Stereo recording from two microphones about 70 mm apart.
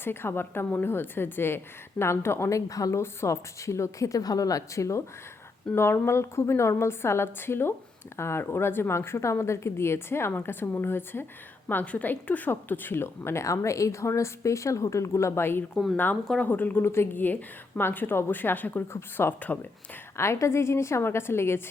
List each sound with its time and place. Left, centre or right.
0.0 s a woman's voice: left
3.0 s a woman's voice: left
18.9 s a woman's voice: left